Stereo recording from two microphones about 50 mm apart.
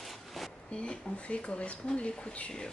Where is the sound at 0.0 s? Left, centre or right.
Centre.